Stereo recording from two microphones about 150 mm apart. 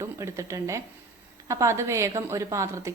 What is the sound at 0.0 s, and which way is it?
A woman's voice, 20° right (ahead or behind).